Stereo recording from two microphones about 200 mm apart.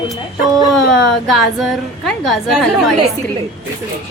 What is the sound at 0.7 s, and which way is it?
A woman's voice, centre (ahead or behind).